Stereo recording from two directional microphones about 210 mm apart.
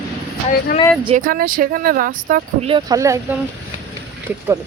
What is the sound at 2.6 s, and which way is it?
Speech, 20° right (ahead or behind).